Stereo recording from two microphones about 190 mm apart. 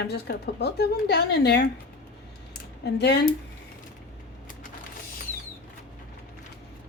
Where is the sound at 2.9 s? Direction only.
65° left (ahead or behind).